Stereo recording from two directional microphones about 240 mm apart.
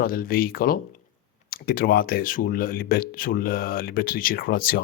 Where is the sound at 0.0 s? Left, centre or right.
Left.